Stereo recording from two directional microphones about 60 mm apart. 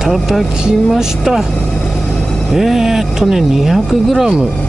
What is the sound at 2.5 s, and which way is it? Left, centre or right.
Speech, centre.